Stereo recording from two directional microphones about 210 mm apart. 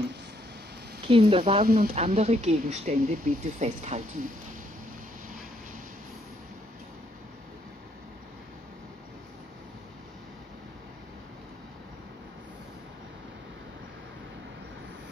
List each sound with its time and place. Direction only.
1.0 s a woman's voice: 25° right (ahead or behind)
1.6 s speech: 45° right (ahead or behind)
2.0 s speech: 30° right (ahead or behind)